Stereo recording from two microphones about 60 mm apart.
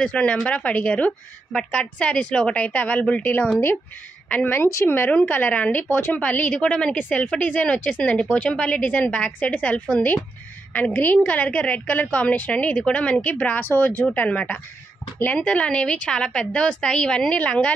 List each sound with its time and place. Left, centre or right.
0.0 s a woman's voice: centre
4.8 s a woman's voice: left
6.6 s a woman's voice: centre
7.6 s a woman's voice: centre